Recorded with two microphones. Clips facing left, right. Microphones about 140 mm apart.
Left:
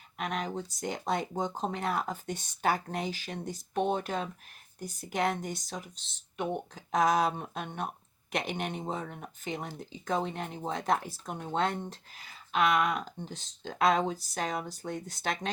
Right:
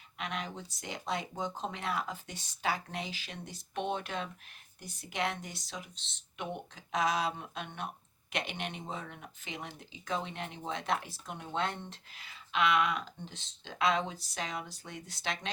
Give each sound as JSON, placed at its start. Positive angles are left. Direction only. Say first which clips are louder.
{"t": 0.2, "sound": "speech", "louder": "left 5 dB", "side_deg": 45}